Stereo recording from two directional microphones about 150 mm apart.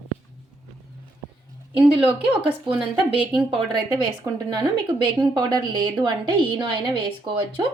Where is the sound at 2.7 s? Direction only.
10° right (ahead or behind).